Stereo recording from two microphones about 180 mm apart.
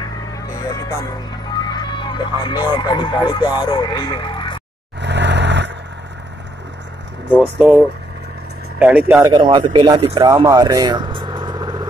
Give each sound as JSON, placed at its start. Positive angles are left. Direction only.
{"t": 1.5, "sound": "speech", "side_deg": 25}
{"t": 5.0, "sound": "vehicle", "side_deg": -75}
{"t": 7.2, "sound": "speech", "side_deg": -10}
{"t": 9.5, "sound": "speech", "side_deg": -30}